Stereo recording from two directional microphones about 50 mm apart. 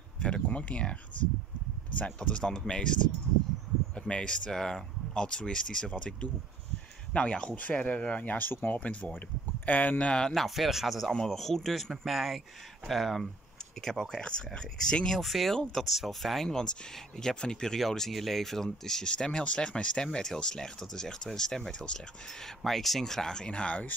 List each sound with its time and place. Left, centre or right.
0.2 s speech: left
2.0 s speech: left
7.2 s speech: left
8.7 s speech: left
10.2 s speech: centre
15.1 s speech: centre
16.4 s speech: centre
22.6 s speech: centre; by 23.9 s left